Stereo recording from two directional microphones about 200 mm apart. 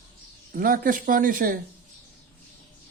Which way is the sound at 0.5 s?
45° right (ahead or behind).